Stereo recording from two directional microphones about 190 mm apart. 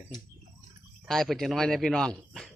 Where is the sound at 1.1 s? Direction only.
Centre (ahead or behind).